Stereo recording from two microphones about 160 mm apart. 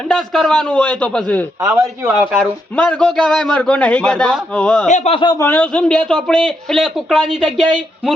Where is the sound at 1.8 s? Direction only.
15° right (ahead or behind).